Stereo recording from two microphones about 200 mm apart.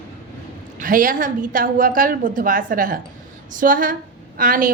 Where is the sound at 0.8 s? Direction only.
45° right (ahead or behind).